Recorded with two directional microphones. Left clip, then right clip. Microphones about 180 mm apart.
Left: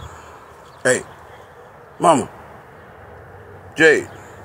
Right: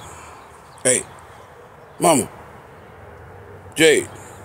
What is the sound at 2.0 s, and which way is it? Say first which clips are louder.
Speech: left 2 dB; 20° right (ahead or behind).